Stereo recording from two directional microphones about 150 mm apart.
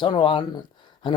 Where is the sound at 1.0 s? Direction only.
35° left (ahead or behind).